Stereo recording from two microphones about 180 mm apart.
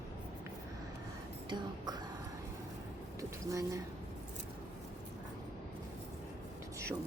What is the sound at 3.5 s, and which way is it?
Speech, 20° right (ahead or behind).